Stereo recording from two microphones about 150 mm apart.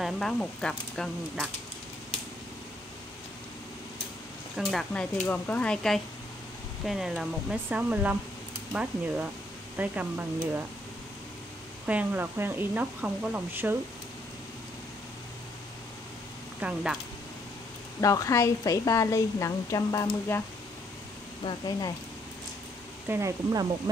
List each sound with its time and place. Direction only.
0.0 s speech: centre (ahead or behind)
4.6 s speech: centre (ahead or behind)
11.8 s speech: 10° right (ahead or behind)
16.6 s speech: 5° right (ahead or behind)
18.0 s a woman's voice: 20° left (ahead or behind)
21.5 s a woman's voice: 30° left (ahead or behind)
23.0 s speech: 20° right (ahead or behind)